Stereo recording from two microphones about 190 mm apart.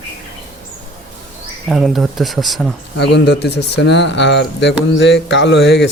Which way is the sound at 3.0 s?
65° left (ahead or behind).